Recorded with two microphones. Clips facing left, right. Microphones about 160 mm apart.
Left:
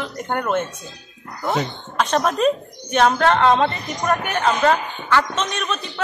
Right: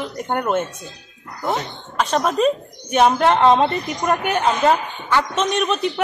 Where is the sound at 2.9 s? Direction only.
15° right (ahead or behind).